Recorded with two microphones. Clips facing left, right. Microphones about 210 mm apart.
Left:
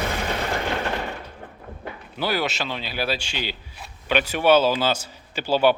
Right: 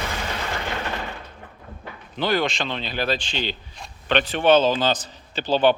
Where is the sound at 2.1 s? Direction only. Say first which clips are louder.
Right 3 dB; 5° left (ahead or behind).